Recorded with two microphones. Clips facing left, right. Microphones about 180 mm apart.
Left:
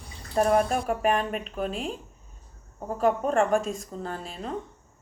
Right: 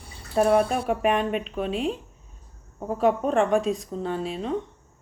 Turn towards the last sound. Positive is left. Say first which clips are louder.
# right 6 dB
turn(degrees=0)  # may be behind; listen again after turning